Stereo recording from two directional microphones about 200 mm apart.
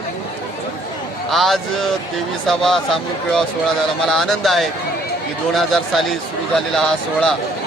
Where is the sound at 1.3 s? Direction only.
Centre (ahead or behind).